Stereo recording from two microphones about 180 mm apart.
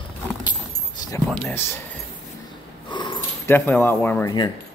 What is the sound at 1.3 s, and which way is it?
Speech, 5° left (ahead or behind).